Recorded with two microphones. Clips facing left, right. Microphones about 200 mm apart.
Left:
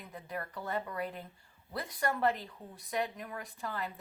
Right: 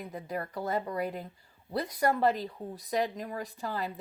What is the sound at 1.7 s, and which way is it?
Speech, 35° right (ahead or behind).